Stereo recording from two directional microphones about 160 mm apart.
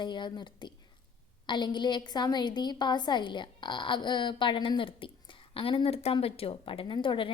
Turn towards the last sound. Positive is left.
turn(degrees=30)  # may be behind; listen again after turning